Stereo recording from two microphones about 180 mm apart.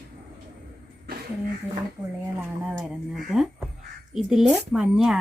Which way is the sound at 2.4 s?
10° right (ahead or behind).